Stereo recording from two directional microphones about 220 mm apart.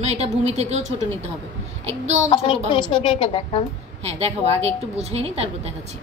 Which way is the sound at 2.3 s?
20° left (ahead or behind).